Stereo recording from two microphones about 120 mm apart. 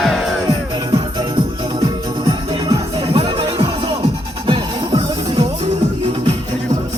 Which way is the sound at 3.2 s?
40° right (ahead or behind).